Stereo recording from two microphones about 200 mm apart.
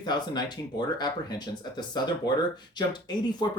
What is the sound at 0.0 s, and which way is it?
Speech, 20° left (ahead or behind).